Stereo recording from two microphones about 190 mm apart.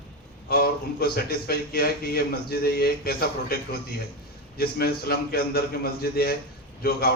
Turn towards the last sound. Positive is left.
turn(degrees=55)  # may be behind; listen again after turning